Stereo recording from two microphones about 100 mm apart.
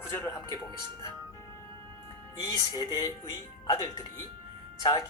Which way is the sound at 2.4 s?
45° left (ahead or behind).